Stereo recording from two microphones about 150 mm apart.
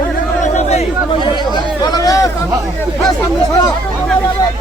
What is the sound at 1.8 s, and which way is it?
Speech, 25° left (ahead or behind).